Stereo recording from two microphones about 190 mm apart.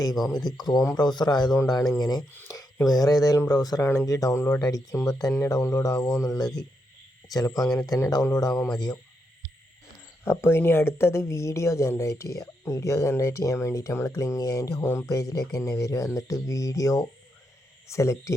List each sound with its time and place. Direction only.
0.1 s speech: centre (ahead or behind)
0.3 s speech: 20° left (ahead or behind)
10.2 s speech: 10° left (ahead or behind)